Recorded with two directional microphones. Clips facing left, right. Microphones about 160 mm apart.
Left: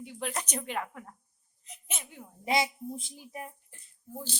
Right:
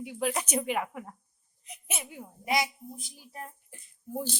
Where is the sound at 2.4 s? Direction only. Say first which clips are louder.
Left 1 dB; 25° left (ahead or behind).